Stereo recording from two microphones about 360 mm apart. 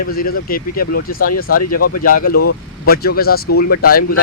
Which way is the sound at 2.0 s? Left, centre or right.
Left.